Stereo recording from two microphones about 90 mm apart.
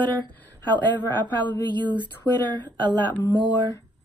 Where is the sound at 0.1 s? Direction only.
55° right (ahead or behind).